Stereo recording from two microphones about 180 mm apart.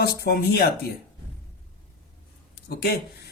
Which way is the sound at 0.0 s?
60° left (ahead or behind).